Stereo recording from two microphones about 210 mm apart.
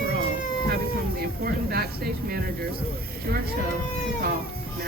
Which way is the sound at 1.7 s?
50° right (ahead or behind).